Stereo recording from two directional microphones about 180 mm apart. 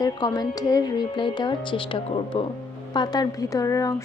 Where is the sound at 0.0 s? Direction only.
20° left (ahead or behind).